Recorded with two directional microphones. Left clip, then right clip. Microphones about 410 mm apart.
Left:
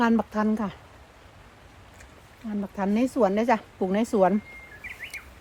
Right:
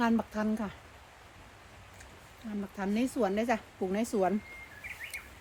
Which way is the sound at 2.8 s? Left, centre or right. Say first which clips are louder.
Left 8 dB; left.